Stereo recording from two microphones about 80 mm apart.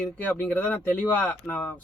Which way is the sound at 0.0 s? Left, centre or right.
Centre.